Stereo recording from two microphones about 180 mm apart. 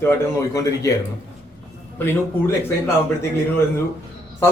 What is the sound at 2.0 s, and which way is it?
Speech, 15° left (ahead or behind).